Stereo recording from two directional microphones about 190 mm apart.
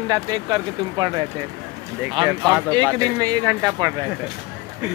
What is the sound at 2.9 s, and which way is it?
Speech, 20° right (ahead or behind).